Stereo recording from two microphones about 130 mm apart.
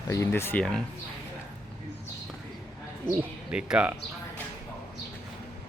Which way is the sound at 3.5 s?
10° right (ahead or behind).